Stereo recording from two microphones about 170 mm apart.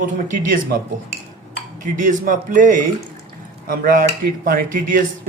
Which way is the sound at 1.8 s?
50° right (ahead or behind).